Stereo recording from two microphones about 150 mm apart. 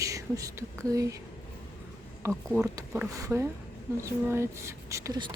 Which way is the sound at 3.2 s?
15° right (ahead or behind).